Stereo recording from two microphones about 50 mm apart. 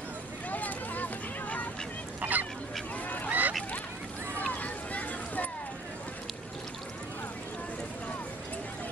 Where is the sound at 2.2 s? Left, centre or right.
Right.